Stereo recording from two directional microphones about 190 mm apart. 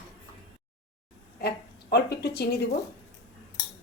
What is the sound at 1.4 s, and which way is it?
Speech, 60° left (ahead or behind).